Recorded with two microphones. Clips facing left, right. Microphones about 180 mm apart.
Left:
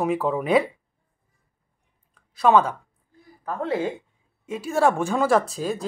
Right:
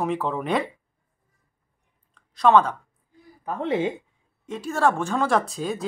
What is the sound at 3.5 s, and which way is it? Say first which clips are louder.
Speech: right 1 dB; 20° right (ahead or behind).